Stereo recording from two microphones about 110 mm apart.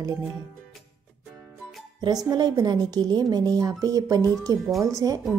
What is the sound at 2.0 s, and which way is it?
A woman's voice, 35° right (ahead or behind).